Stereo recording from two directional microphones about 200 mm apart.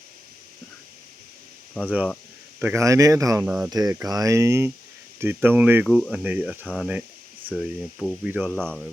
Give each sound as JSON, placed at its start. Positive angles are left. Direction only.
{"t": 1.8, "sound": "speech", "side_deg": -5}